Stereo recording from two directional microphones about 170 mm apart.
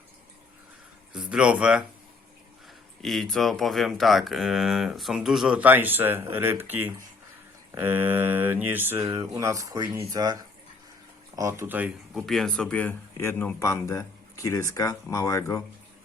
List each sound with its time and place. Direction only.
1.1 s speech: 5° right (ahead or behind)
3.0 s speech: centre (ahead or behind); by 10.3 s 25° right (ahead or behind)
11.3 s speech: 20° right (ahead or behind)
12.2 s speech: centre (ahead or behind); by 15.6 s 20° left (ahead or behind)